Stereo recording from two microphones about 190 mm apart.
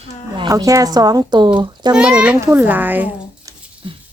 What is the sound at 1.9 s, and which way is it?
A child's voice, 5° right (ahead or behind).